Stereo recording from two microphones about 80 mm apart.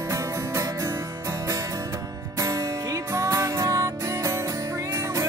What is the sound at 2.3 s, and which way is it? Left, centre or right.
Music, right.